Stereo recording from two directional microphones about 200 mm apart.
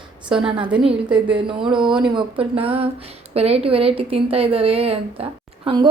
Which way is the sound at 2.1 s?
25° right (ahead or behind).